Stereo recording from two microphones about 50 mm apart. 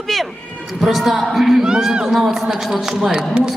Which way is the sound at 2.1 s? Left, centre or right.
Centre.